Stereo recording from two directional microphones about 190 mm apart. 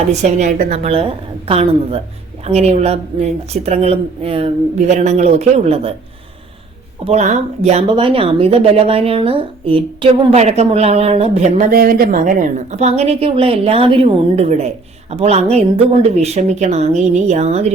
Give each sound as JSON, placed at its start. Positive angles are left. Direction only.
{"t": 0.1, "sound": "a woman's voice", "side_deg": -35}
{"t": 7.0, "sound": "a woman's voice", "side_deg": -35}
{"t": 11.7, "sound": "a woman's voice", "side_deg": -50}